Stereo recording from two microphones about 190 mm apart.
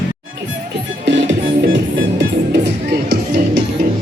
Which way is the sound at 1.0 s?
75° right (ahead or behind).